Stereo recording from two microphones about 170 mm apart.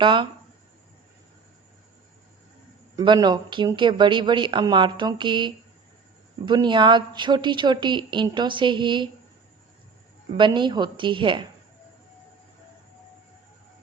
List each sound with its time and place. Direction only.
0.0 s a woman's voice: 30° right (ahead or behind)
2.9 s a woman's voice: 25° right (ahead or behind)
10.3 s a woman's voice: 25° right (ahead or behind)